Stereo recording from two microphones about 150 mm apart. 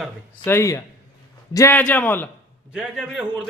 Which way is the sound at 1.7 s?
10° left (ahead or behind).